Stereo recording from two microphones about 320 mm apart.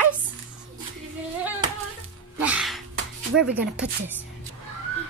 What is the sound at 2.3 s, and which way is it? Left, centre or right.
Music, centre.